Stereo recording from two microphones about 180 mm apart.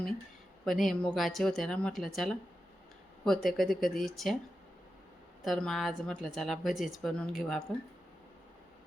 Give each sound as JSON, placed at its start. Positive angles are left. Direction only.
{"t": 0.6, "sound": "speech", "side_deg": 0}
{"t": 5.4, "sound": "speech", "side_deg": 0}